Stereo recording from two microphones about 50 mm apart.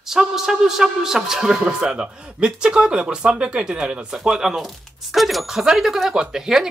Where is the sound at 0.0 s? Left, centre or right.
Centre.